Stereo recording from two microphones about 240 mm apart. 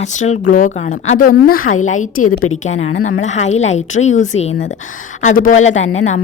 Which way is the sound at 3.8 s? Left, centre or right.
Left.